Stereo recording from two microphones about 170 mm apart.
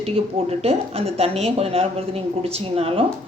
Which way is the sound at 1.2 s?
35° right (ahead or behind).